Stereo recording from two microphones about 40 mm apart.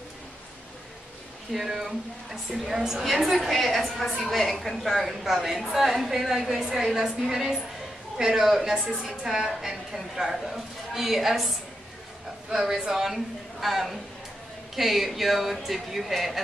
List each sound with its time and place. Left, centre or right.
1.5 s a man's voice: centre